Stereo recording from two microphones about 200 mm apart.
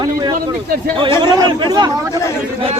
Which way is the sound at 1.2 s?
20° right (ahead or behind).